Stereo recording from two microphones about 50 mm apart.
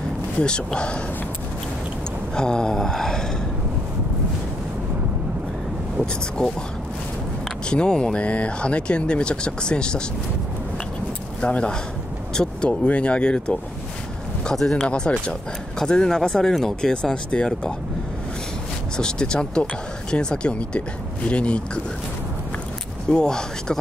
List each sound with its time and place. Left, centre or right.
0.4 s speech: centre
2.3 s speech: centre
5.9 s speech: centre
7.7 s speech: centre
11.4 s speech: left
14.5 s speech: centre
14.9 s speech: left
18.9 s speech: centre
23.0 s speech: centre